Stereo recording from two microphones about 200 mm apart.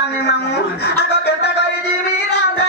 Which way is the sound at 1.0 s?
55° left (ahead or behind).